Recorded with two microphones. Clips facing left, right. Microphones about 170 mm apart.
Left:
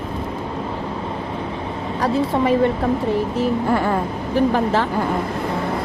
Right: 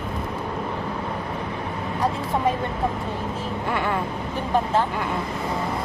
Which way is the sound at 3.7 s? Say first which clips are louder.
Left 2 dB; 40° left (ahead or behind).